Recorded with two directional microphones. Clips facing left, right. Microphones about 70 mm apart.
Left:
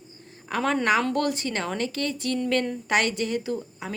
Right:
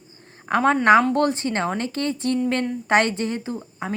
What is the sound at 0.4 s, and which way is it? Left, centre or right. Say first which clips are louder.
A woman's voice: right 7 dB; right.